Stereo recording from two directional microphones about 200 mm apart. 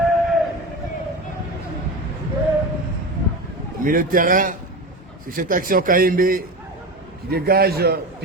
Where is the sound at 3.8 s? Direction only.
45° right (ahead or behind).